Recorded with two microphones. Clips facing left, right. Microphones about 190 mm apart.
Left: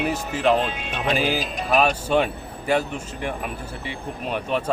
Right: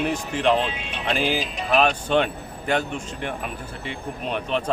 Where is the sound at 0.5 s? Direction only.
45° left (ahead or behind).